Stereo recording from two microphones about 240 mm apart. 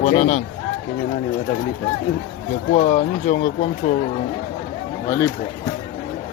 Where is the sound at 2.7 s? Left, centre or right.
Left.